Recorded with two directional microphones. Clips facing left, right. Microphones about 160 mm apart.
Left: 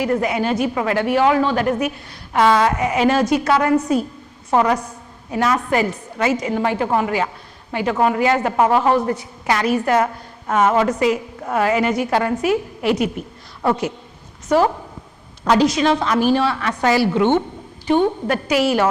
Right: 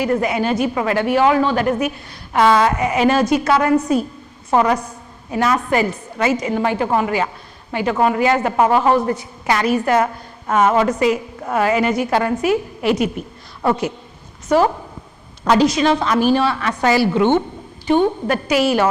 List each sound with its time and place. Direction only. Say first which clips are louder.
0.0 s a woman's voice: right 1 dB; 15° right (ahead or behind)
15.4 s a woman's voice: right 1 dB; 10° right (ahead or behind)